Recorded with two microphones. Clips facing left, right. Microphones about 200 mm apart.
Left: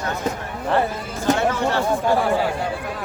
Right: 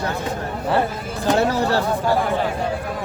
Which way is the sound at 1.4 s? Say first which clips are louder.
Right 2 dB; 35° right (ahead or behind).